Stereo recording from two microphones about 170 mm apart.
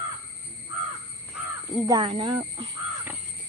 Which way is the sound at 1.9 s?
30° right (ahead or behind).